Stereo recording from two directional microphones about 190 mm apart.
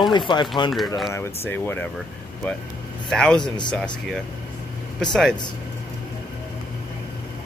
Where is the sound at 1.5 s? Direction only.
10° left (ahead or behind).